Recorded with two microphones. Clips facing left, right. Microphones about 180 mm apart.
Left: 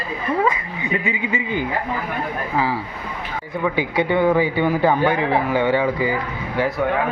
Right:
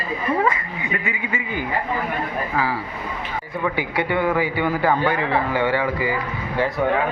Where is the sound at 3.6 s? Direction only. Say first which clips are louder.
Left 3 dB; 20° left (ahead or behind).